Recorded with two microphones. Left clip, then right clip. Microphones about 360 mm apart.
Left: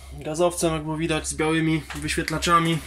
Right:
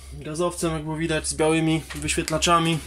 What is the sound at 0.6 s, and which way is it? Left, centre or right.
Speech, centre.